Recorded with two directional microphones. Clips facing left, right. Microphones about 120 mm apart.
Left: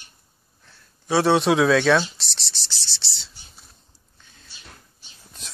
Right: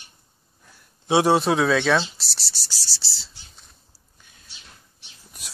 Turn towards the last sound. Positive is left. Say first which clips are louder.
# left 1 dB
turn(degrees=-10)  # may be behind; listen again after turning